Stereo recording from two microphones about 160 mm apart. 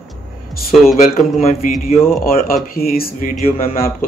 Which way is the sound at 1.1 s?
60° left (ahead or behind).